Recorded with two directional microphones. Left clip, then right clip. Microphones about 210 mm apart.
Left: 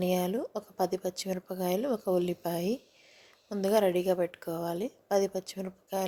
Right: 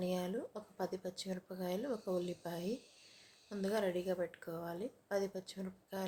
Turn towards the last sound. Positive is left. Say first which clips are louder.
# left 11 dB
turn(degrees=35)  # may be behind; listen again after turning